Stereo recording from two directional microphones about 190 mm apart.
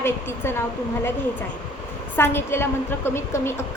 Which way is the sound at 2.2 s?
10° left (ahead or behind).